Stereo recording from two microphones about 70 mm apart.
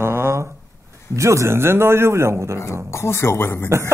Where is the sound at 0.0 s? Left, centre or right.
Right.